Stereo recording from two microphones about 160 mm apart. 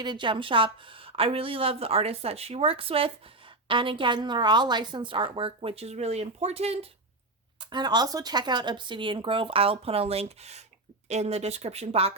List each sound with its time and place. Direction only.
0.0 s a woman's voice: 30° right (ahead or behind)
7.6 s a woman's voice: 30° right (ahead or behind)